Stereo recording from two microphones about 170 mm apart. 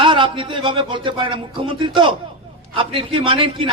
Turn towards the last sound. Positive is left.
turn(degrees=-30)  # may be behind; listen again after turning